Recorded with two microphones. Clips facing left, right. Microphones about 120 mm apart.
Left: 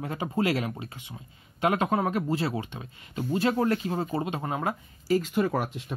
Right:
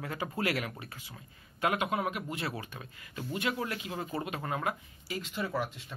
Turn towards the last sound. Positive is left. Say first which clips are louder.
# left 6 dB
turn(degrees=55)  # may be behind; listen again after turning